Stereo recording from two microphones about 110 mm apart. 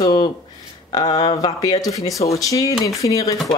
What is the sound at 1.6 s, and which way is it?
Speech, 35° left (ahead or behind).